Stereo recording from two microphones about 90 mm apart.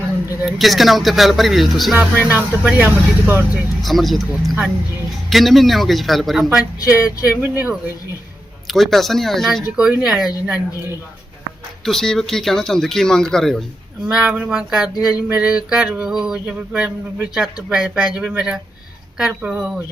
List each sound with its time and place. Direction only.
0.4 s speech: centre (ahead or behind)
2.2 s speech: 20° right (ahead or behind)
3.8 s speech: centre (ahead or behind)
7.0 s speech: 20° right (ahead or behind)
8.6 s speech: centre (ahead or behind)
10.0 s a sound: 5° right (ahead or behind)
11.9 s speech: 5° left (ahead or behind)
14.1 s a sound: 10° right (ahead or behind)